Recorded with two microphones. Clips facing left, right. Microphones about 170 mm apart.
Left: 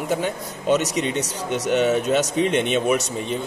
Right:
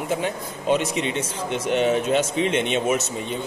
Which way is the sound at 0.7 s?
45° left (ahead or behind).